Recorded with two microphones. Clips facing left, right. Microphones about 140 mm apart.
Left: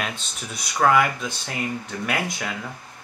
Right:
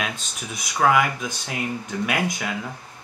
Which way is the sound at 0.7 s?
5° right (ahead or behind).